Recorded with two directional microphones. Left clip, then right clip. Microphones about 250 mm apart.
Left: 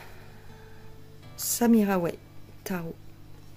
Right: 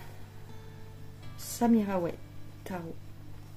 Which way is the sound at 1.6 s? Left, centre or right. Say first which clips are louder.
Left 4 dB; left.